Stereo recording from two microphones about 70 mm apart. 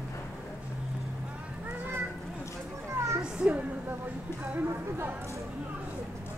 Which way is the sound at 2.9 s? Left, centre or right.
Right.